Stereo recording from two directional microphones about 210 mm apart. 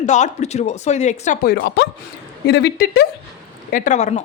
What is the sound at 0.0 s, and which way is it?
Speech, 35° left (ahead or behind).